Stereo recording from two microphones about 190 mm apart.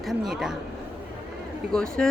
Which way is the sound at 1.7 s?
5° left (ahead or behind).